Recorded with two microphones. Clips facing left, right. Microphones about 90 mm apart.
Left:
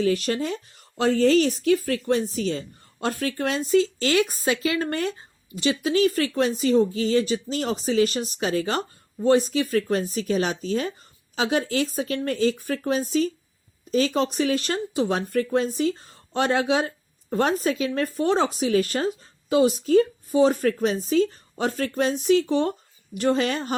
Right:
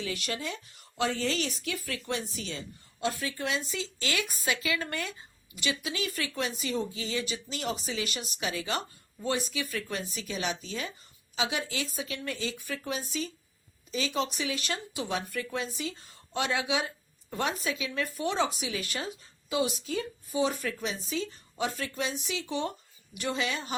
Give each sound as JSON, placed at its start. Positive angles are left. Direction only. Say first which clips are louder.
{"t": 0.0, "sound": "speech", "louder": "left 12 dB", "side_deg": 40}